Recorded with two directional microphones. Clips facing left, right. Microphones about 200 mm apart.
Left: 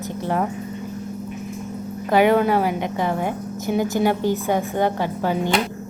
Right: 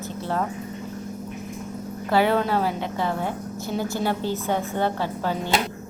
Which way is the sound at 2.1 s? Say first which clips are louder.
Left 4 dB; 15° left (ahead or behind).